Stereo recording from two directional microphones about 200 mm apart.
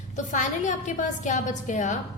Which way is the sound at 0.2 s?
40° left (ahead or behind).